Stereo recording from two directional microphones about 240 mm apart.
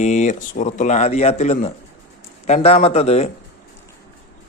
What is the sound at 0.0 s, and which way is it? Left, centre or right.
A man's voice, left.